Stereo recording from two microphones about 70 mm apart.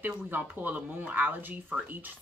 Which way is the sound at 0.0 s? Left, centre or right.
Right.